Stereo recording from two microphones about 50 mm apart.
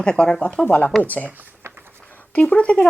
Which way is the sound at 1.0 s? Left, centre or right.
Left.